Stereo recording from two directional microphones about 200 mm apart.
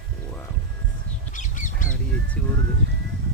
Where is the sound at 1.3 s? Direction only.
40° left (ahead or behind).